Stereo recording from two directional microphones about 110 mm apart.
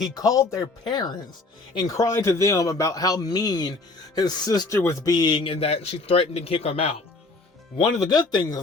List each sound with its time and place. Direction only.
0.0 s a man's voice: 35° left (ahead or behind)
4.7 s speech: 25° left (ahead or behind)
5.1 s speech: 40° left (ahead or behind)
5.5 s a man's voice: 65° left (ahead or behind)
7.9 s a man's voice: 35° left (ahead or behind)